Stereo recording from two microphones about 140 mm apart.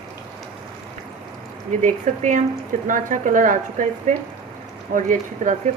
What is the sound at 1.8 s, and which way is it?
A woman's voice, 60° right (ahead or behind).